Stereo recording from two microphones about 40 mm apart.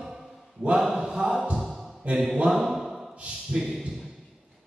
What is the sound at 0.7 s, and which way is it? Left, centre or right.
Mantra, centre.